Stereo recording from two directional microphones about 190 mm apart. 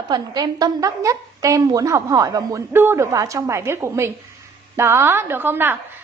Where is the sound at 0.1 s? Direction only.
20° right (ahead or behind).